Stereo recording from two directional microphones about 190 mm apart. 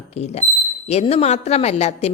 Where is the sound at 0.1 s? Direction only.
35° left (ahead or behind).